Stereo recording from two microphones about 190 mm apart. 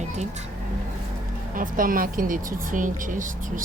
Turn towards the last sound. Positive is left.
turn(degrees=-45)  # may be behind; listen again after turning